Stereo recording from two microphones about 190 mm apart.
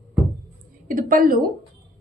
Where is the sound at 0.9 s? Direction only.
45° right (ahead or behind).